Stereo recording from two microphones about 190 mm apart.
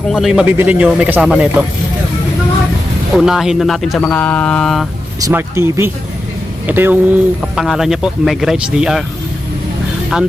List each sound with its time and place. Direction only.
0.1 s speech: centre (ahead or behind)
3.2 s speech: centre (ahead or behind)
5.2 s speech: 15° right (ahead or behind)